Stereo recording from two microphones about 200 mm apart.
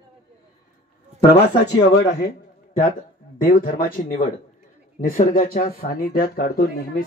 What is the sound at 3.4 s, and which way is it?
Speech, 45° left (ahead or behind).